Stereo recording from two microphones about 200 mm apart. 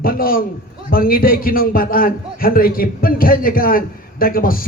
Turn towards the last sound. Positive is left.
turn(degrees=45)  # may be behind; listen again after turning